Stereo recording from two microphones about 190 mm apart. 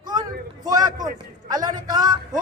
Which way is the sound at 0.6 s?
20° right (ahead or behind).